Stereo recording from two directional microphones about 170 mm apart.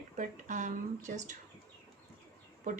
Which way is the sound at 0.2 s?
45° right (ahead or behind).